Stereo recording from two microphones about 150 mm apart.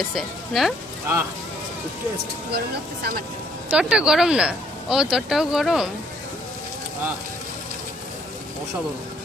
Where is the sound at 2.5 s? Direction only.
90° right.